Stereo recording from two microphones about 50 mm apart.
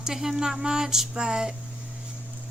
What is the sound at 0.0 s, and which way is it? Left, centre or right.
Speech, centre.